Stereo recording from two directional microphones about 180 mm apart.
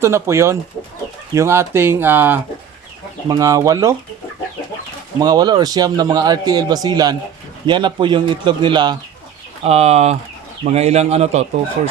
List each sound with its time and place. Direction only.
0.0 s speech: 15° right (ahead or behind)
5.2 s a man's voice: 25° right (ahead or behind)
9.6 s speech: 35° right (ahead or behind)